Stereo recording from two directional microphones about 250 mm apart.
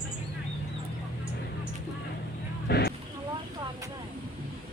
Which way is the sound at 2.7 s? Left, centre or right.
Left.